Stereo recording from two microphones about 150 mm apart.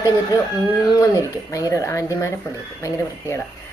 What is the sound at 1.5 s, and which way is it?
A woman's voice, 20° left (ahead or behind).